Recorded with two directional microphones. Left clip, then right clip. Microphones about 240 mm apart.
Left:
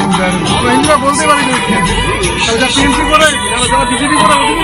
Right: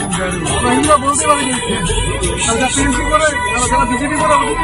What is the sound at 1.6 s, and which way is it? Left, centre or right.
Speech, centre.